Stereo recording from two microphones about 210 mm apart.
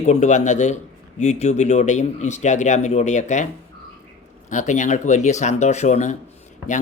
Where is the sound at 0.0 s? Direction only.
35° left (ahead or behind).